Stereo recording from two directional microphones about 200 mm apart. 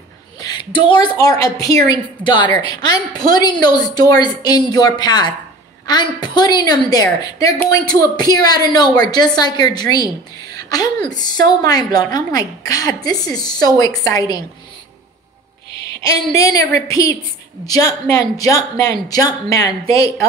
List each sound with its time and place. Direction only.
0.4 s a woman's voice: 20° left (ahead or behind)
16.3 s a woman's voice: 15° left (ahead or behind)